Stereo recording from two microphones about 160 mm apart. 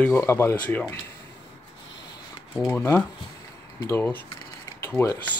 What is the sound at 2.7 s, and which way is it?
Speech, 15° left (ahead or behind).